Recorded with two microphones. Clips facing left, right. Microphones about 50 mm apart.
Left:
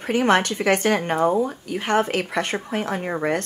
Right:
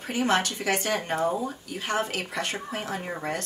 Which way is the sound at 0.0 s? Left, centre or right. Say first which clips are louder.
Left 6 dB; left.